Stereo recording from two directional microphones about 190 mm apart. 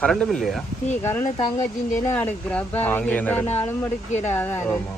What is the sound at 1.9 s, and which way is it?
Speech, 10° left (ahead or behind).